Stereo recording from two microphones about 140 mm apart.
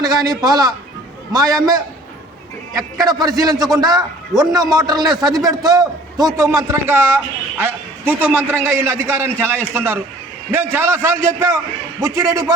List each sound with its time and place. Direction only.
0.0 s a man's voice: 25° right (ahead or behind)
3.0 s a man's voice: 25° right (ahead or behind)